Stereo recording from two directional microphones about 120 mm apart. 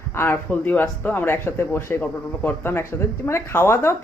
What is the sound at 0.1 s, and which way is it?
Speech, 20° left (ahead or behind).